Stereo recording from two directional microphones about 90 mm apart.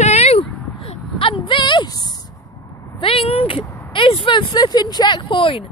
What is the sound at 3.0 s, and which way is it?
Speech, 90° left.